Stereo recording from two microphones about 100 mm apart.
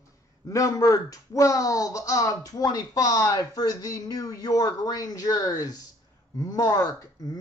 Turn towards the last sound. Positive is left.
turn(degrees=35)  # may be behind; listen again after turning